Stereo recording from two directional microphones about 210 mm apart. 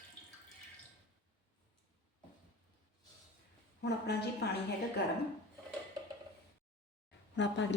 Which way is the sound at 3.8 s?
50° left (ahead or behind).